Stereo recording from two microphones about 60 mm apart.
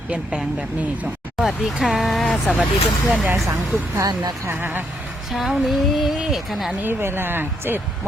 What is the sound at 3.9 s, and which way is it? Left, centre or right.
Speech, right.